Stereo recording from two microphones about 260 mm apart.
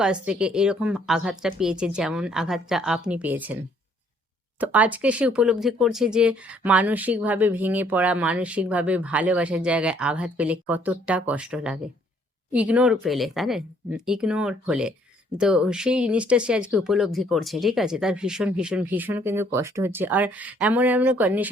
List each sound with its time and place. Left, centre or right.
0.0 s speech: centre
4.6 s speech: centre